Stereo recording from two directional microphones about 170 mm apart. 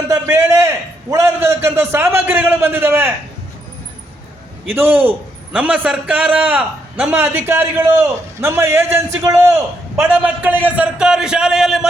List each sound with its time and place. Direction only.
0.1 s a man's voice: 15° right (ahead or behind)
4.7 s a man's voice: 10° right (ahead or behind)